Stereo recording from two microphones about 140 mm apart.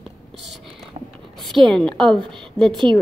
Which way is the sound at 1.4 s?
Centre (ahead or behind).